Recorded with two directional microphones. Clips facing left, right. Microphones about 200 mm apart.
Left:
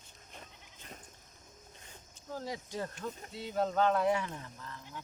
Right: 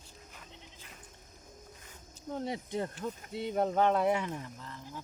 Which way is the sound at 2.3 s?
25° right (ahead or behind).